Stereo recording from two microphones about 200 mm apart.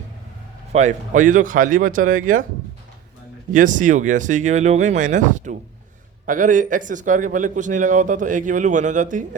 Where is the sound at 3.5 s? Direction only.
40° right (ahead or behind).